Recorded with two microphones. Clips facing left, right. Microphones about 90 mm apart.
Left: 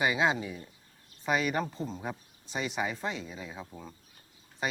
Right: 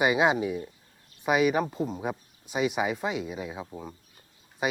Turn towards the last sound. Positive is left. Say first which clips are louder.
# right 5 dB
turn(degrees=-10)  # may be behind; listen again after turning